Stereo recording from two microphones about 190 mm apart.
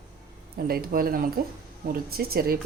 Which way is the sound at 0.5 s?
50° right (ahead or behind).